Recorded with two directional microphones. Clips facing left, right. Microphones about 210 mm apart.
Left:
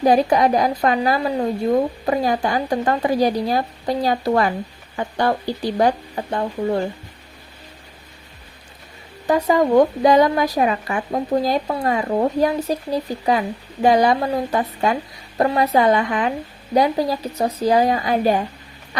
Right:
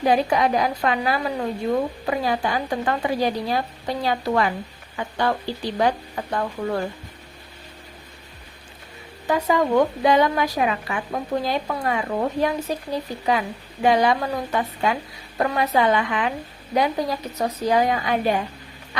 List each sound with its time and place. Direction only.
0.0 s speech: 40° left (ahead or behind); by 6.8 s 25° left (ahead or behind)
9.2 s speech: 40° left (ahead or behind)
13.8 s speech: 40° left (ahead or behind)